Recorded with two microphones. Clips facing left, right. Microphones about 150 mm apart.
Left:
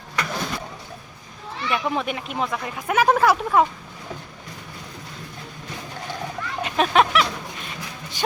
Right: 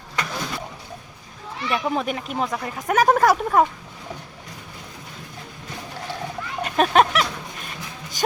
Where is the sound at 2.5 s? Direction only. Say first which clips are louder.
Right 1 dB; 40° right (ahead or behind).